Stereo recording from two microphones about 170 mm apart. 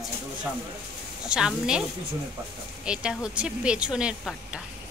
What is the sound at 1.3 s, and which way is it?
Speech, 5° right (ahead or behind).